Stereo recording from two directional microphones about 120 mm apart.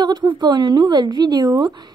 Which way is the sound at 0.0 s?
40° right (ahead or behind).